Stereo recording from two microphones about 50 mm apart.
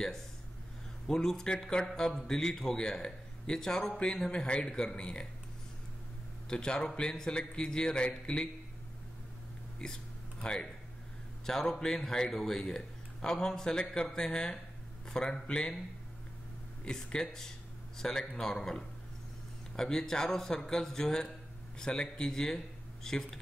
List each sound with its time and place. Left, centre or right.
1.0 s speech: centre
6.5 s speech: centre
10.4 s speech: centre
16.8 s speech: centre